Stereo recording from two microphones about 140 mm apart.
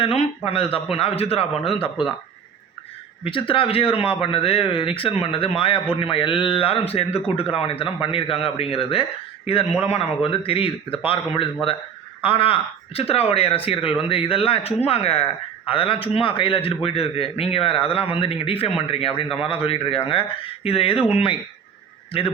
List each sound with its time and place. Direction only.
0.0 s speech: 45° left (ahead or behind)
3.2 s speech: 40° left (ahead or behind)